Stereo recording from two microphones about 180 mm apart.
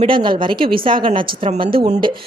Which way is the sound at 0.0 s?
30° right (ahead or behind).